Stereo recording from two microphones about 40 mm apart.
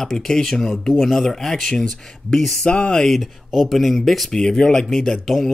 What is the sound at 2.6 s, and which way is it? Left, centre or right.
Speech, left.